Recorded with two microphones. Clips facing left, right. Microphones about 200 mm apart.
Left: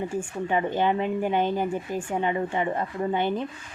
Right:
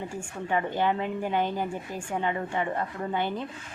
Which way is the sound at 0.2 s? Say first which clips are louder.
Left 1 dB; 20° left (ahead or behind).